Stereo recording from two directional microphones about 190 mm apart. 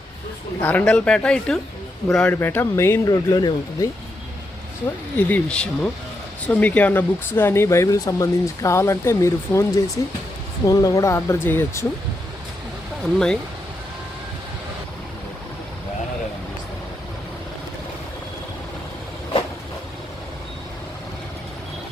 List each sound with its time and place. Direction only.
0.6 s speech: 10° left (ahead or behind)
5.1 s speech: 5° left (ahead or behind)
13.0 s speech: 5° left (ahead or behind)